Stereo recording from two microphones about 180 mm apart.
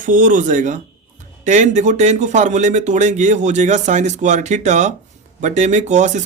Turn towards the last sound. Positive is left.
turn(degrees=-40)  # may be behind; listen again after turning